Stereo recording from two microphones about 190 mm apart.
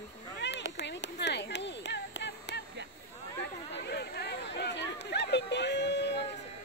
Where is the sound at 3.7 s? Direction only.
60° left (ahead or behind).